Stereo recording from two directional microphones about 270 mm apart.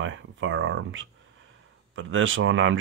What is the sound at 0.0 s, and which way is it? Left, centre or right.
Speech, right.